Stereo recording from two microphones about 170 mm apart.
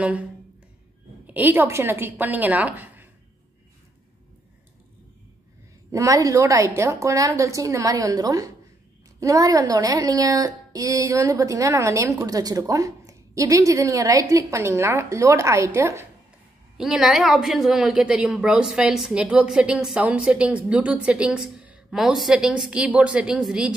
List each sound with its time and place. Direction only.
1.2 s a woman's voice: 10° right (ahead or behind)
5.9 s a woman's voice: 20° right (ahead or behind)
16.7 s a woman's voice: 5° right (ahead or behind)